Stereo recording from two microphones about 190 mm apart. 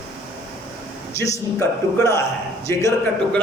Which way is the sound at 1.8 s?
15° left (ahead or behind).